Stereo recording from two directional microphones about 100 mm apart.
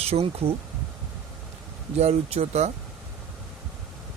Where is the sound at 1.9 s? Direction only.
90° right.